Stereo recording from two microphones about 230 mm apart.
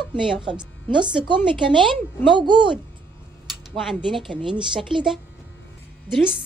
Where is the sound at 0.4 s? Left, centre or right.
Right.